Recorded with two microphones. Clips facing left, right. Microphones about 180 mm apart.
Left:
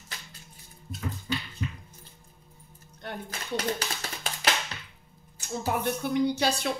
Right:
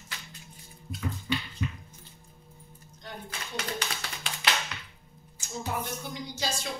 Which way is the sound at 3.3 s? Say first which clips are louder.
Left 6 dB; 40° left (ahead or behind).